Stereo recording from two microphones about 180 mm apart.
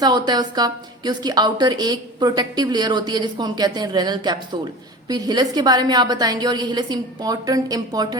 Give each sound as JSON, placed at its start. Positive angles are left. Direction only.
{"t": 0.0, "sound": "a woman's voice", "side_deg": -25}